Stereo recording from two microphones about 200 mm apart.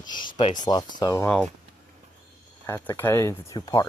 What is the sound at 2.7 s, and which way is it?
Speech, 10° left (ahead or behind).